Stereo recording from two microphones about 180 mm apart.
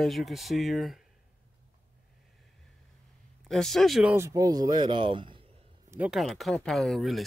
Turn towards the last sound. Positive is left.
turn(degrees=0)  # may be behind; listen again after turning